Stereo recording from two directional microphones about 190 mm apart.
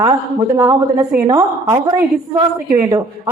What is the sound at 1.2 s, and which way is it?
A woman's voice, 20° right (ahead or behind).